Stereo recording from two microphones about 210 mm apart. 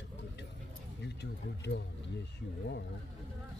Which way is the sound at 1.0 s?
55° left (ahead or behind).